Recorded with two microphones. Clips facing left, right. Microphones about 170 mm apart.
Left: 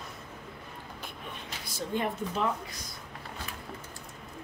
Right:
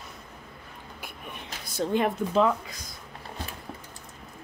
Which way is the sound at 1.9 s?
90° right.